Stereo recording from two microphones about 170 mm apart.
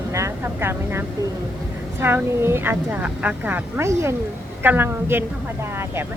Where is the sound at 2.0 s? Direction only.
15° right (ahead or behind).